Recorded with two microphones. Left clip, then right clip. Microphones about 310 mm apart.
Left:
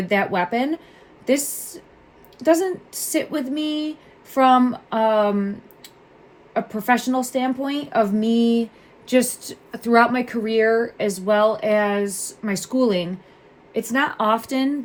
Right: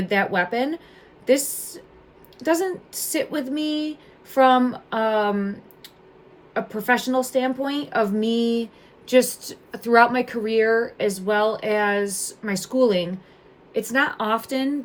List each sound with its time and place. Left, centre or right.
0.0 s a woman's voice: centre